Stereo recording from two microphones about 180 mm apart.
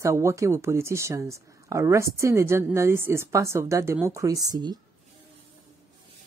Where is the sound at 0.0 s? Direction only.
15° right (ahead or behind).